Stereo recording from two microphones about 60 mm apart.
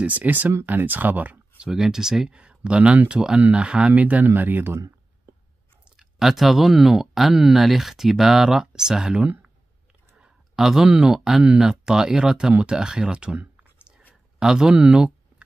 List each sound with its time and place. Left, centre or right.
0.0 s speech: right
1.6 s speech: centre; by 4.8 s right
5.9 s speech: centre
10.1 s a sound: centre
10.6 s speech: centre